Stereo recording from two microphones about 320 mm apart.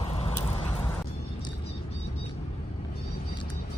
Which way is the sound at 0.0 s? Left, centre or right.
Centre.